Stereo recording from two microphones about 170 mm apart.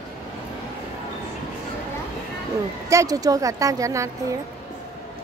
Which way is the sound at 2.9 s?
20° right (ahead or behind).